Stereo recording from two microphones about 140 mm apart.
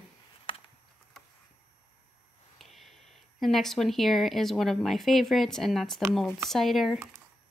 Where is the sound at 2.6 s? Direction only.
Centre (ahead or behind).